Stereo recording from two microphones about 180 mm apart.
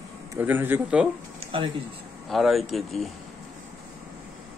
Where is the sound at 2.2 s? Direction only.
Centre (ahead or behind).